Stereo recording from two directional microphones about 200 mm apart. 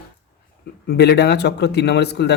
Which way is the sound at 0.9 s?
55° left (ahead or behind).